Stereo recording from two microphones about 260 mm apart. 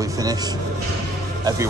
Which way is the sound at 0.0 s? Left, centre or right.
Centre.